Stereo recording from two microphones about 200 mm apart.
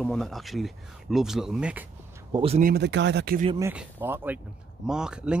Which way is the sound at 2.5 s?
50° right (ahead or behind).